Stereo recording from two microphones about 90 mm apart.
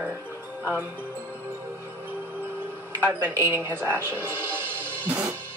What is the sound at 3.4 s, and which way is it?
Speech, 25° right (ahead or behind).